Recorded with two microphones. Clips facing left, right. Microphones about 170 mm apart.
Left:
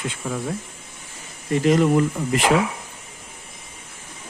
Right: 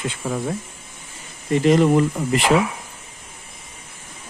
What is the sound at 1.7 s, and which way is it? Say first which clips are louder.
Speech: right 2 dB; 25° right (ahead or behind).